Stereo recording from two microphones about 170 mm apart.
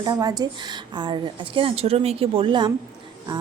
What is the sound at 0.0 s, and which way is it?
A woman's voice, 25° right (ahead or behind).